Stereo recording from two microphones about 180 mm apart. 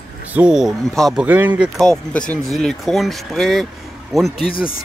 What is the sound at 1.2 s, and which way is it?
Speech, 10° right (ahead or behind).